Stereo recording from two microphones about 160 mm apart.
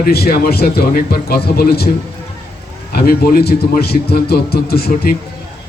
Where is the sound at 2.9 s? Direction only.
70° left (ahead or behind).